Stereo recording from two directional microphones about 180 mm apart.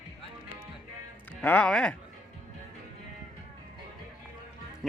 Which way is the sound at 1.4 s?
5° left (ahead or behind).